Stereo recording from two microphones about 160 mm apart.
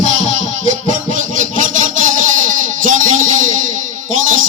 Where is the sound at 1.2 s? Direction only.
55° right (ahead or behind).